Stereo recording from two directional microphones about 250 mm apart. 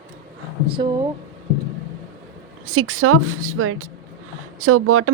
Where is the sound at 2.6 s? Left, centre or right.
Right.